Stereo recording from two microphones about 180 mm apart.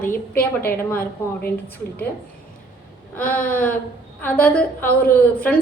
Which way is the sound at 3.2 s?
10° left (ahead or behind).